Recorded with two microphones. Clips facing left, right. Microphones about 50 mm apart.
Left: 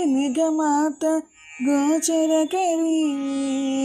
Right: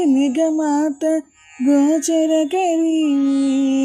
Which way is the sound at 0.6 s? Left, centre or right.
Right.